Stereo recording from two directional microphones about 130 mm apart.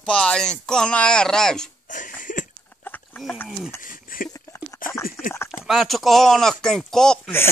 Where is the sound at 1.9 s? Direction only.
90° left.